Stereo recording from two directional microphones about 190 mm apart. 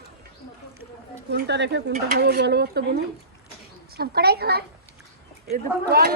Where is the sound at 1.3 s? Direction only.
65° right (ahead or behind).